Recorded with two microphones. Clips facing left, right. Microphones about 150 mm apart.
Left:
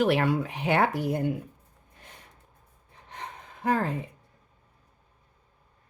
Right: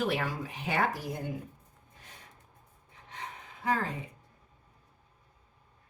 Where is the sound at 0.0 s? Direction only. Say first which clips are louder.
Left 8 dB; 65° left (ahead or behind).